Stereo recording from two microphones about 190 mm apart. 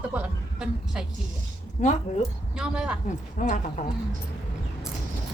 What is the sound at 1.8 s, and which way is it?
Speech, 40° left (ahead or behind).